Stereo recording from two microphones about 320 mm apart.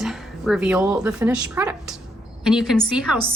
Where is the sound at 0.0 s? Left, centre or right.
Centre.